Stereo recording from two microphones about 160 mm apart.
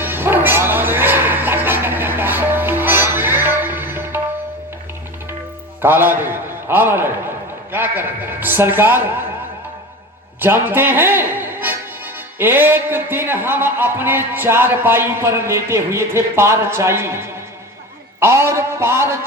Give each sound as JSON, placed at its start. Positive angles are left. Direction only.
{"t": 0.0, "sound": "music", "side_deg": -15}
{"t": 5.8, "sound": "speech", "side_deg": -15}
{"t": 10.4, "sound": "speech", "side_deg": -15}